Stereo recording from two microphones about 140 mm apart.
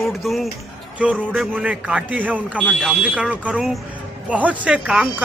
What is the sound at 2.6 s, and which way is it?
Speech, 5° left (ahead or behind).